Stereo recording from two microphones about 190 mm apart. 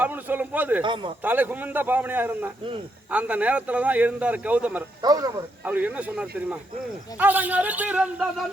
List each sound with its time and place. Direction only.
0.0 s a man's voice: 10° right (ahead or behind)
0.8 s a man's voice: 25° right (ahead or behind)
1.2 s a man's voice: 10° right (ahead or behind)
5.0 s a man's voice: 20° right (ahead or behind)
5.6 s a man's voice: 10° right (ahead or behind)